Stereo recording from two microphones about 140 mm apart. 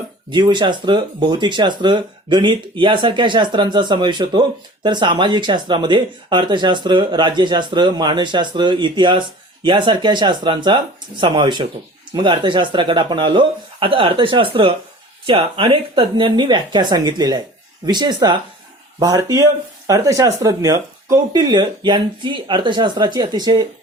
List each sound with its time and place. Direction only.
0.3 s speech: 30° right (ahead or behind)